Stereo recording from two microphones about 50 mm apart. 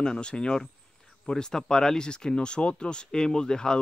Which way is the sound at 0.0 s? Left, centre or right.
Centre.